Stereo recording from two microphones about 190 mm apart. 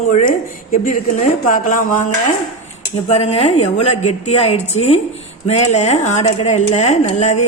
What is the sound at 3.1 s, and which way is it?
Speech, 35° left (ahead or behind).